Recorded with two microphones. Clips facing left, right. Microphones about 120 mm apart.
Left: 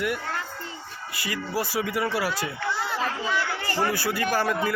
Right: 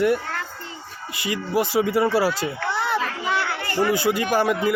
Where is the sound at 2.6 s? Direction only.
60° right (ahead or behind).